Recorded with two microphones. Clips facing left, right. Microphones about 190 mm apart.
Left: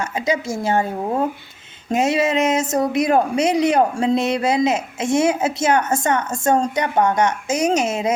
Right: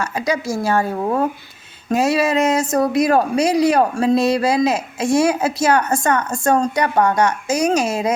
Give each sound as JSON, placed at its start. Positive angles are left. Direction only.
{"t": 0.0, "sound": "speech", "side_deg": 20}